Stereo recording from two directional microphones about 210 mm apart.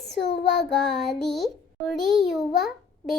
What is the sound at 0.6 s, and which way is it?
A child's voice, centre (ahead or behind).